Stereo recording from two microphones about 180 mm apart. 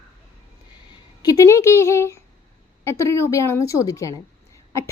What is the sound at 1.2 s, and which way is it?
A woman's voice, 20° left (ahead or behind).